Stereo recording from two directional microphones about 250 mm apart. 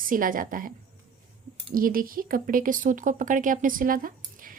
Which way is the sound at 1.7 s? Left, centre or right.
Right.